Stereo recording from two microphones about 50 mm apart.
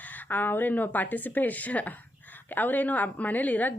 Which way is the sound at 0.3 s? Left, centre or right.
Left.